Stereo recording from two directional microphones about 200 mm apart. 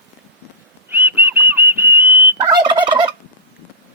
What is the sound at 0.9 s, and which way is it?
Whistle, 10° right (ahead or behind).